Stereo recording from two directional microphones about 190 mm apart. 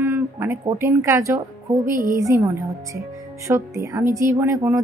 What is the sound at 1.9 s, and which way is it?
Speech, 45° right (ahead or behind).